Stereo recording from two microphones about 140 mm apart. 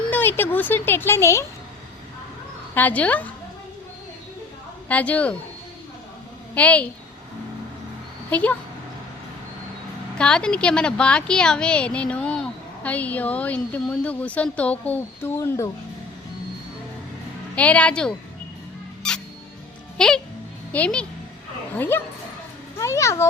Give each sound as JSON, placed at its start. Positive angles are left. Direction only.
{"t": 0.1, "sound": "a woman's voice", "side_deg": 15}
{"t": 2.7, "sound": "a woman's voice", "side_deg": 10}
{"t": 4.9, "sound": "a woman's voice", "side_deg": 10}
{"t": 6.5, "sound": "a woman's voice", "side_deg": 10}
{"t": 8.3, "sound": "speech", "side_deg": 10}
{"t": 10.2, "sound": "a woman's voice", "side_deg": 5}
{"t": 17.5, "sound": "a woman's voice", "side_deg": 10}
{"t": 19.0, "sound": "music", "side_deg": 5}
{"t": 20.0, "sound": "a woman's voice", "side_deg": 5}